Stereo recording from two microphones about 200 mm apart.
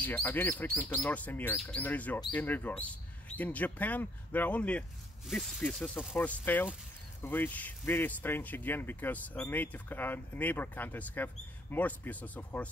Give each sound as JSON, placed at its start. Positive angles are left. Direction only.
{"t": 0.0, "sound": "speech", "side_deg": 10}